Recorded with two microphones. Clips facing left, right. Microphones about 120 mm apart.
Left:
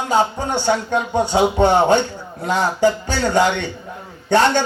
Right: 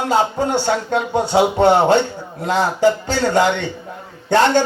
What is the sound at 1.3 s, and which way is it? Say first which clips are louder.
Speech: right 2 dB; 40° right (ahead or behind).